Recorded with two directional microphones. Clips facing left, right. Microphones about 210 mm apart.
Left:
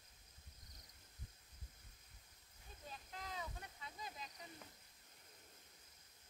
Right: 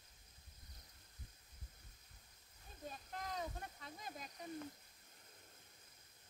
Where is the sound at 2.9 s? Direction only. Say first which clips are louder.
Right 3 dB; 45° right (ahead or behind).